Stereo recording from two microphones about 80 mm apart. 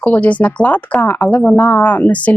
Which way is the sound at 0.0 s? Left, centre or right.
Centre.